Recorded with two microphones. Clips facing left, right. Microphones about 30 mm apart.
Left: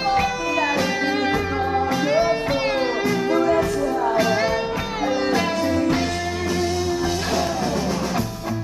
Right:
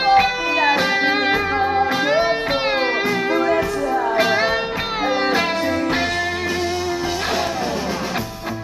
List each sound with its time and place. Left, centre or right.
0.0 s music: right
3.3 s music: right